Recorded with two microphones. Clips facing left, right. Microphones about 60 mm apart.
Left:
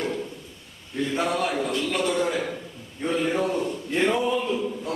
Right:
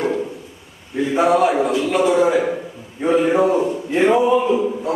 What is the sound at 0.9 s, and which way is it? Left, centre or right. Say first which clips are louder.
A man's voice: right 9 dB; centre.